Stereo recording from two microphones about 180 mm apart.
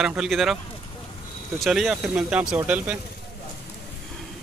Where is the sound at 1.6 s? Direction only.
Centre (ahead or behind).